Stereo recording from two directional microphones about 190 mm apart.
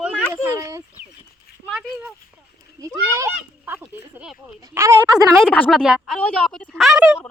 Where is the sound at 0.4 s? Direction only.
15° right (ahead or behind).